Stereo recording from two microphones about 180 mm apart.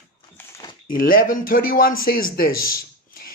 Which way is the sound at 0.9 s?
50° left (ahead or behind).